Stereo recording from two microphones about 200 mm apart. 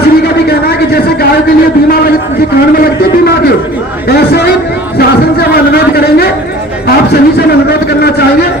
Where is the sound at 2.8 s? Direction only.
50° left (ahead or behind).